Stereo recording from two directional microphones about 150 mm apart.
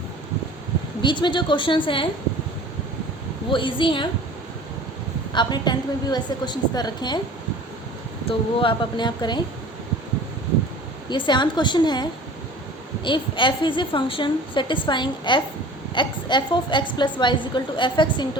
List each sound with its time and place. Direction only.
1.0 s a woman's voice: 30° left (ahead or behind)
3.5 s a woman's voice: 35° left (ahead or behind)
5.3 s a woman's voice: 30° left (ahead or behind)
8.3 s a woman's voice: 35° left (ahead or behind)
11.1 s a woman's voice: 30° left (ahead or behind)
13.1 s a woman's voice: 35° left (ahead or behind)